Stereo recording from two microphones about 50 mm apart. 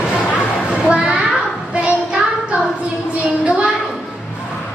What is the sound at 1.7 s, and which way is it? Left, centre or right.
Child singing, right.